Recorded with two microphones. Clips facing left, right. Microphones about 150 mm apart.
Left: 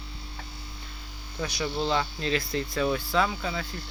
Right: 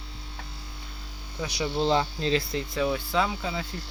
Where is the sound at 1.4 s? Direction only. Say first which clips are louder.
Right 2 dB; 20° right (ahead or behind).